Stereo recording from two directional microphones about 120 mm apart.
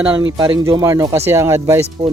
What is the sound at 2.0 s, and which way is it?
Speech, 55° right (ahead or behind).